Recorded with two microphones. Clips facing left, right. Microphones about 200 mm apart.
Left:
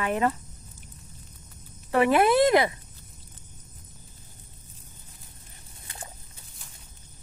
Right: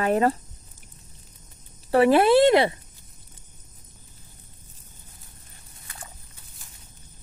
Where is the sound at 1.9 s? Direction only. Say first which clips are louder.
Right 4 dB; 30° right (ahead or behind).